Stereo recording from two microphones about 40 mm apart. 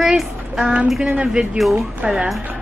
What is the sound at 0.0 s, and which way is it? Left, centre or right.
Child singing, centre.